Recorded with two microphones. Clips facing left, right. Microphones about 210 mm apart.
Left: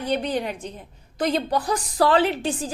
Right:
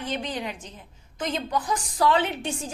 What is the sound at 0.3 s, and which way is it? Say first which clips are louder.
Speech: left 6 dB; 55° left (ahead or behind).